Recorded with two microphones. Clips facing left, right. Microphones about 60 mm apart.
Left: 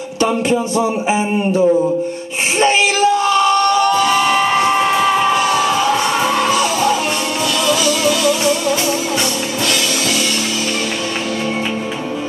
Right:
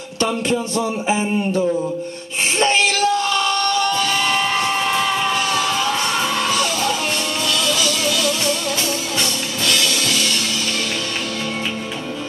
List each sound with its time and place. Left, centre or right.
0.2 s a man's voice: left
2.6 s music: centre